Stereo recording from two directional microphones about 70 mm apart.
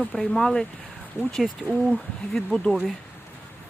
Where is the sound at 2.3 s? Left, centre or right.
Centre.